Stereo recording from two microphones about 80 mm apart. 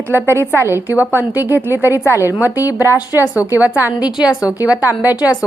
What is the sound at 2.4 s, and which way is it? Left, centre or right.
Speech, left.